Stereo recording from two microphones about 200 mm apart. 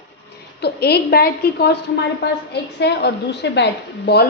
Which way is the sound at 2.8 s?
55° left (ahead or behind).